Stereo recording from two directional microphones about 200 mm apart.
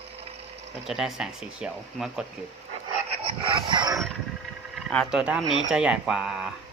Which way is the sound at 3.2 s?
25° right (ahead or behind).